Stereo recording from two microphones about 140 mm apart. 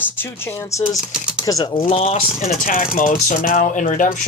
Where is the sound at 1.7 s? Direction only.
40° left (ahead or behind).